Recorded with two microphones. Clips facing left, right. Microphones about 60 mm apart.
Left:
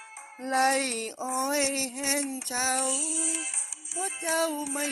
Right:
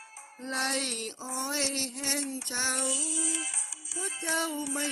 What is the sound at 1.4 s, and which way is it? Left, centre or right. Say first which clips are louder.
Music: left 5 dB; centre.